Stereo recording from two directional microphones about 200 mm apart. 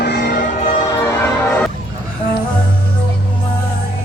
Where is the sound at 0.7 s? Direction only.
25° left (ahead or behind).